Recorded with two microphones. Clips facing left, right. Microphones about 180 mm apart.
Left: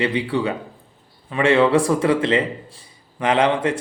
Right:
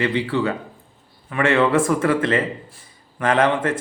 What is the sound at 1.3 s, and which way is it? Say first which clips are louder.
A man's voice: left 2 dB; 20° left (ahead or behind).